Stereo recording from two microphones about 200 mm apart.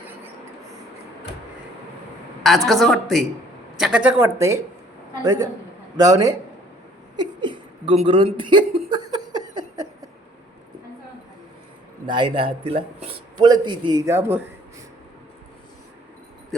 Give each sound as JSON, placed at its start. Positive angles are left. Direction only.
{"t": 2.6, "sound": "a man's voice", "side_deg": 0}
{"t": 7.2, "sound": "chuckle", "side_deg": -25}
{"t": 12.0, "sound": "a man's voice", "side_deg": -25}